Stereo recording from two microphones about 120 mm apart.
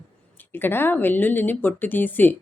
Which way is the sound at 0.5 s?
20° left (ahead or behind).